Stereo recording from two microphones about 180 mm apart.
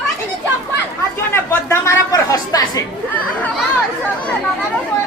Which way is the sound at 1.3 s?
15° left (ahead or behind).